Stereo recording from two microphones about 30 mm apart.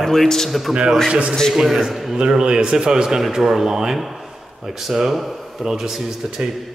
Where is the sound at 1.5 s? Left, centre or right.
Centre.